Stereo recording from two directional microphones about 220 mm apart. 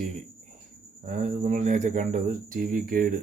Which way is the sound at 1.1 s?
35° right (ahead or behind).